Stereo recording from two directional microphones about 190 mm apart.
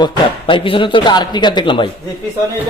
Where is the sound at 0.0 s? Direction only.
25° left (ahead or behind).